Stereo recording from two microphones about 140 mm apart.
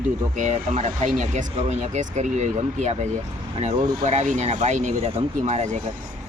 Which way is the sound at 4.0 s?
65° right (ahead or behind).